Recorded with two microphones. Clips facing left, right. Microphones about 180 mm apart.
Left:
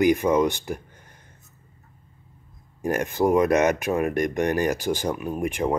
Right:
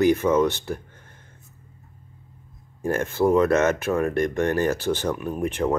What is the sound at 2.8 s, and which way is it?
Speech, 15° left (ahead or behind).